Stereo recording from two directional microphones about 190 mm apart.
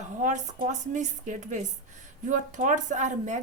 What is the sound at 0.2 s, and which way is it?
A woman's voice, 40° right (ahead or behind).